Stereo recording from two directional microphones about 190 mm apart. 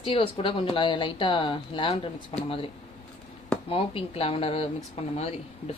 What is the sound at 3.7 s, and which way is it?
Speech, 30° left (ahead or behind).